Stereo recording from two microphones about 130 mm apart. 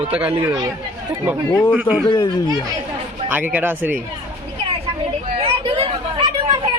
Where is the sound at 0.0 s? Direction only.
10° right (ahead or behind).